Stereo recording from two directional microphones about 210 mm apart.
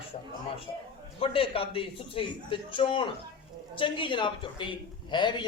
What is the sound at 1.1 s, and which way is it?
A man's voice, 25° left (ahead or behind).